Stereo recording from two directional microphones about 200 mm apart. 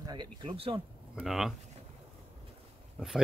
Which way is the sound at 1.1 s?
Centre (ahead or behind).